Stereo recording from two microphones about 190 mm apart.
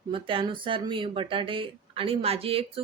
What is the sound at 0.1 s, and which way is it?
Speech, 25° right (ahead or behind).